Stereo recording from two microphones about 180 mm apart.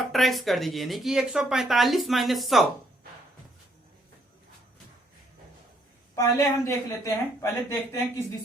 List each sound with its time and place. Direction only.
0.0 s speech: centre (ahead or behind)
6.1 s a woman's voice: 20° left (ahead or behind)